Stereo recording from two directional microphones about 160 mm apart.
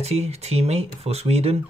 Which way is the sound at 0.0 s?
40° right (ahead or behind).